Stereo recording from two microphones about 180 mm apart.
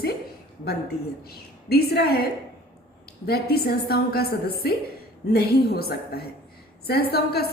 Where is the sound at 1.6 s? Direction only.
60° left (ahead or behind).